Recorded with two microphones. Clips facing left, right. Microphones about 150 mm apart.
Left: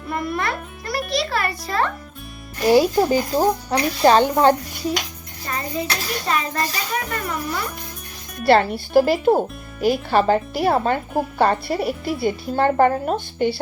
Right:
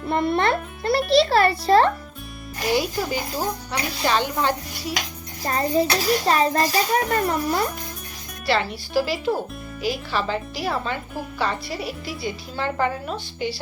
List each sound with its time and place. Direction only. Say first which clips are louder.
0.1 s a child's voice: right 4 dB; 30° right (ahead or behind)
2.7 s speech: left 8 dB; 40° left (ahead or behind)
5.5 s a child's voice: right 5 dB; 35° right (ahead or behind)
8.4 s speech: left 7 dB; 50° left (ahead or behind)